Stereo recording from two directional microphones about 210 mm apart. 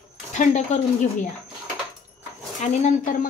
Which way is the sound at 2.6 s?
35° left (ahead or behind).